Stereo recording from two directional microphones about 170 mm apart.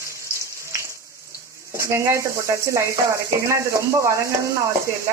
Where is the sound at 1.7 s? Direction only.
15° right (ahead or behind).